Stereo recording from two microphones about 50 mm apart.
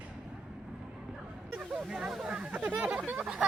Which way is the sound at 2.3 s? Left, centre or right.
Right.